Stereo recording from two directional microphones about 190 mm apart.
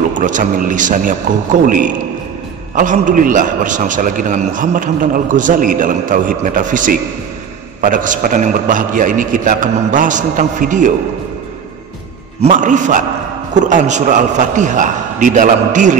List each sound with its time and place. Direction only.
0.1 s a man's voice: 40° right (ahead or behind)
2.7 s a man's voice: 40° right (ahead or behind)
12.4 s a man's voice: 40° right (ahead or behind)